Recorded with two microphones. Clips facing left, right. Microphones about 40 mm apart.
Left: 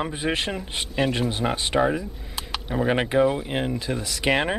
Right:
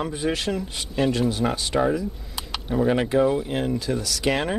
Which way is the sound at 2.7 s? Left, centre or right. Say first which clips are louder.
Right 1 dB; left.